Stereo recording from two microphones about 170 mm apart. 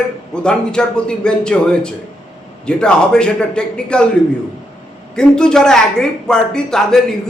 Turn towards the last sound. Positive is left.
turn(degrees=5)  # may be behind; listen again after turning